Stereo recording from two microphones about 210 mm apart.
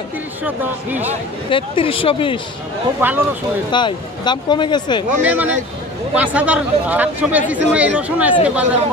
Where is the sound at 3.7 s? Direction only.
20° left (ahead or behind).